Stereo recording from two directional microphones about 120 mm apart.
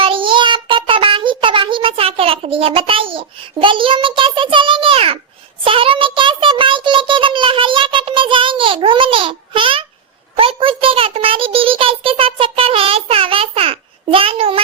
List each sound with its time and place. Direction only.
0.0 s child singing: 45° right (ahead or behind)
5.6 s a child's voice: 50° right (ahead or behind)
10.3 s a sound: 50° right (ahead or behind)